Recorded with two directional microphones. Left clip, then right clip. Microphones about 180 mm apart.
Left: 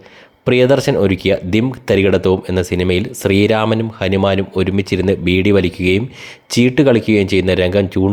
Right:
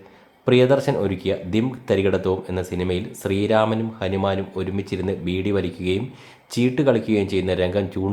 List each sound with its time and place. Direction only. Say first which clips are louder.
0.4 s speech: left 5 dB; 35° left (ahead or behind)